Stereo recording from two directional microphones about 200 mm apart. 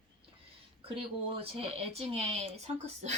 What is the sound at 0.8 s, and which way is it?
Speech, 30° right (ahead or behind).